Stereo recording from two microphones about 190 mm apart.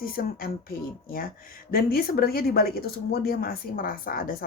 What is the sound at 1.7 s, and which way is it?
Speech, 50° left (ahead or behind).